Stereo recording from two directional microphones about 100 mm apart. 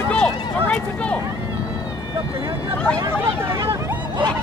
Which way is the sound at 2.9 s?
25° right (ahead or behind).